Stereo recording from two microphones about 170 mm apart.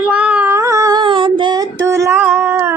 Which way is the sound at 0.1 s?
10° right (ahead or behind).